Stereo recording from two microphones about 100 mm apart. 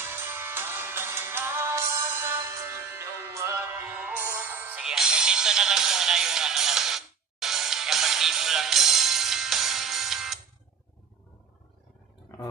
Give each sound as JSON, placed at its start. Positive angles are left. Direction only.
{"t": 0.0, "sound": "music", "side_deg": -25}
{"t": 4.8, "sound": "music", "side_deg": -5}